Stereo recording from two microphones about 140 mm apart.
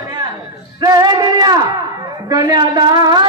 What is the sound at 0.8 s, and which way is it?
Male singing, 25° right (ahead or behind).